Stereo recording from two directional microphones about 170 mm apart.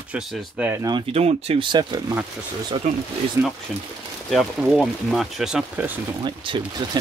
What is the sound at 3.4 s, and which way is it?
Speech, 15° right (ahead or behind).